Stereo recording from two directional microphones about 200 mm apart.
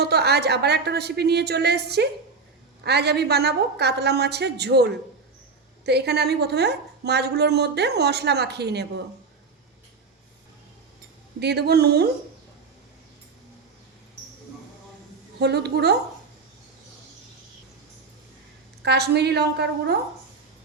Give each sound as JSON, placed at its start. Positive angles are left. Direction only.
{"t": 0.0, "sound": "a woman's voice", "side_deg": -55}
{"t": 11.3, "sound": "a woman's voice", "side_deg": -55}
{"t": 15.4, "sound": "a woman's voice", "side_deg": -55}
{"t": 18.8, "sound": "a woman's voice", "side_deg": -55}